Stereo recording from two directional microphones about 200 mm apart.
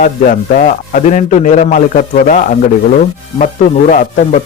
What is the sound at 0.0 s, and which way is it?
A man's voice, 40° left (ahead or behind).